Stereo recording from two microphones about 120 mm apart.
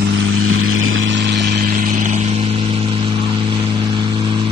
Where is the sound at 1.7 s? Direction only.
90° right.